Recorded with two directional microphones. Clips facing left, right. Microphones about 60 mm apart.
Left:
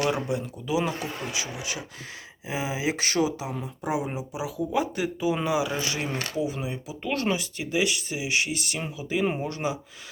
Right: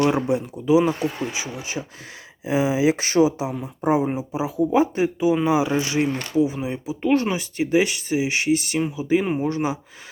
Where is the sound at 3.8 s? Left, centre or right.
Right.